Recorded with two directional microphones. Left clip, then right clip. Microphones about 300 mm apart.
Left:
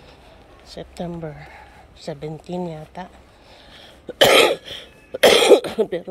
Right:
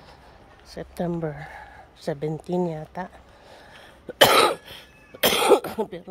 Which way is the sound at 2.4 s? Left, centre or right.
Right.